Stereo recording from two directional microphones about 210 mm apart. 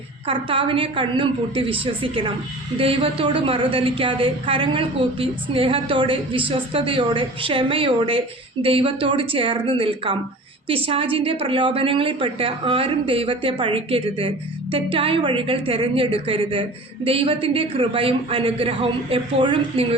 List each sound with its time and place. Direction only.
0.3 s a woman's voice: 25° right (ahead or behind)